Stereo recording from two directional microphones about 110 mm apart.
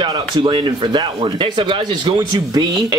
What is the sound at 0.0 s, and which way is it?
Speech, 50° right (ahead or behind).